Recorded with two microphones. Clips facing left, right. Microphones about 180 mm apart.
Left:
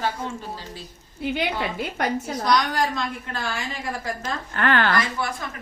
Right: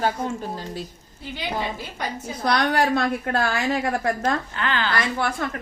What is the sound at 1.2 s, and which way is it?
A woman's voice, 65° left (ahead or behind).